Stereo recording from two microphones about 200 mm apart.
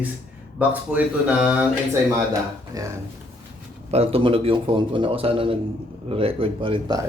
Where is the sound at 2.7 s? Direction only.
15° right (ahead or behind).